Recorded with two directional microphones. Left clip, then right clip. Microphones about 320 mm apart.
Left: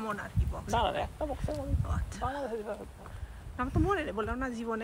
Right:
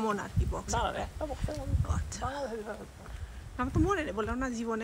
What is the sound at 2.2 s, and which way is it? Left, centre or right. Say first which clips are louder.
Speech: left 1 dB; left.